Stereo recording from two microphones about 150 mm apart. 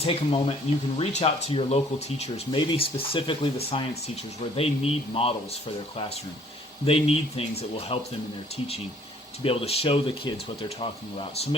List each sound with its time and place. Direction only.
0.0 s speech: 40° left (ahead or behind)
6.8 s speech: 40° left (ahead or behind)
9.4 s speech: 40° left (ahead or behind)